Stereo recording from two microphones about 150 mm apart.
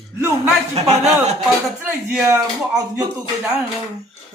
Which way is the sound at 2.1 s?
15° right (ahead or behind).